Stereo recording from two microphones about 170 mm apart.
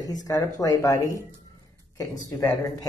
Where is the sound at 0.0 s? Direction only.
20° left (ahead or behind).